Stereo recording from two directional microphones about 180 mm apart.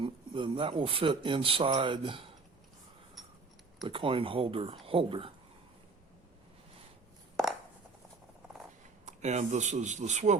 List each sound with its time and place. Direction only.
0.0 s a man's voice: 30° right (ahead or behind)
3.2 s a sound: centre (ahead or behind)
3.8 s a man's voice: 30° right (ahead or behind)
9.0 s speech: 40° right (ahead or behind)